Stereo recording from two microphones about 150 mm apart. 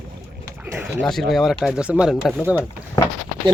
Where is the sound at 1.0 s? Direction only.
Centre (ahead or behind).